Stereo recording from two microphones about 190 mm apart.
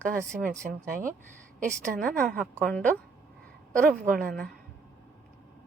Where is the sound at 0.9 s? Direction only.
45° right (ahead or behind).